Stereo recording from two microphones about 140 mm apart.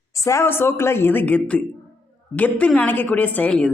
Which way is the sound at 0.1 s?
20° left (ahead or behind).